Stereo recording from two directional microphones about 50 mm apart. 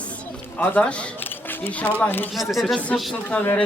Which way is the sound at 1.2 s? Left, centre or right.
Left.